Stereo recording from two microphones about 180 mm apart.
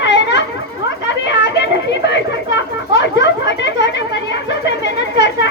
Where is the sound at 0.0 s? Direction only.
75° left (ahead or behind).